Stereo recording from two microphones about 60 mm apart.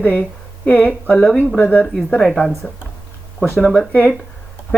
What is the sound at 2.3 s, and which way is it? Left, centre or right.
Speech, centre.